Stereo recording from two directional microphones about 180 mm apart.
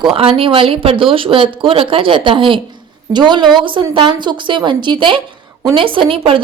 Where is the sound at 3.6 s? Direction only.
25° right (ahead or behind).